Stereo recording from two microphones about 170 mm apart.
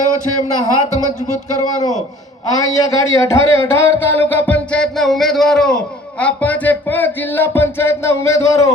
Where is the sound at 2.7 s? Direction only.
20° left (ahead or behind).